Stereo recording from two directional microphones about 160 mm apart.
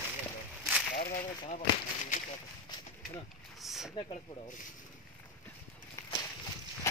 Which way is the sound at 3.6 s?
Centre (ahead or behind).